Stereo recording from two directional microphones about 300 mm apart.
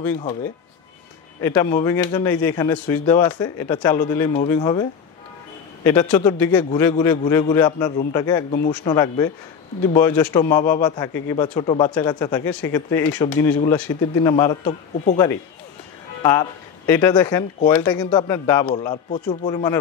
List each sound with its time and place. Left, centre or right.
1.4 s speech: centre
5.9 s speech: centre